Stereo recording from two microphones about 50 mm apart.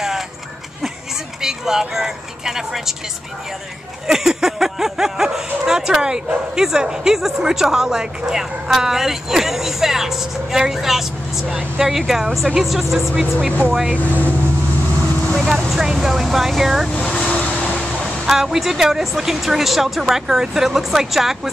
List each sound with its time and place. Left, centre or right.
1.4 s speech: centre
4.1 s speech: centre
13.1 s speech: right
15.3 s speech: centre
16.9 s speech: centre
17.3 s vehicle: left
18.2 s speech: centre